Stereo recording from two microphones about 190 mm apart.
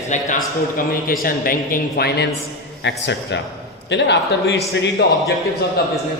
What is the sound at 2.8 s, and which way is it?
A man's voice, 65° left (ahead or behind).